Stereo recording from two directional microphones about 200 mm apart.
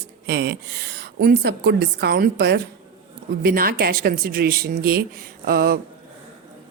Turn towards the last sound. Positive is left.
turn(degrees=-50)  # may be behind; listen again after turning